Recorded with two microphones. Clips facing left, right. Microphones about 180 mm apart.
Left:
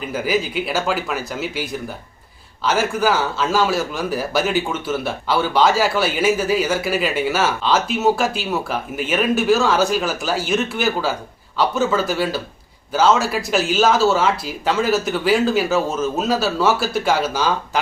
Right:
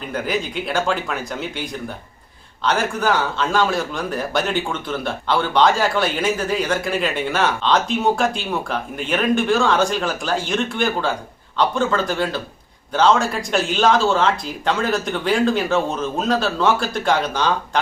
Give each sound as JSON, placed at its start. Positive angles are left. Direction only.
{"t": 0.1, "sound": "a man's voice", "side_deg": 5}